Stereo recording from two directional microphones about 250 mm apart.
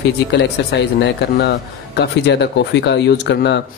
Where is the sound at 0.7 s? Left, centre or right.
Left.